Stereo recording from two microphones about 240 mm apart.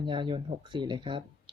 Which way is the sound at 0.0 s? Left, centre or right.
Right.